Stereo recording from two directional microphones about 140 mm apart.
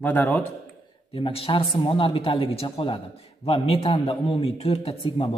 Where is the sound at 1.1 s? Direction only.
40° left (ahead or behind).